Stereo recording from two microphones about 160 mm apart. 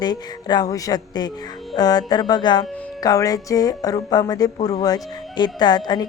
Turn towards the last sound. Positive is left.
turn(degrees=25)  # may be behind; listen again after turning